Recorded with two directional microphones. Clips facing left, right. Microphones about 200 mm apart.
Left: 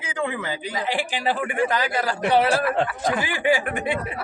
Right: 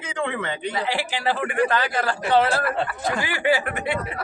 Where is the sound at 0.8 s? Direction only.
15° left (ahead or behind).